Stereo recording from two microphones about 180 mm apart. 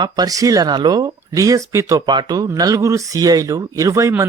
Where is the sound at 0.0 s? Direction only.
20° right (ahead or behind).